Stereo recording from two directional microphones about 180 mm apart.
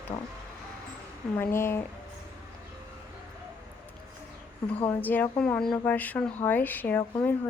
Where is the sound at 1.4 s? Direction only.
15° left (ahead or behind).